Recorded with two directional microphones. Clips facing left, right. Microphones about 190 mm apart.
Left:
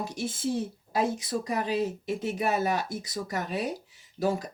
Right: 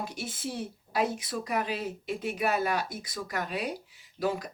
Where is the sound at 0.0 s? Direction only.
45° left (ahead or behind).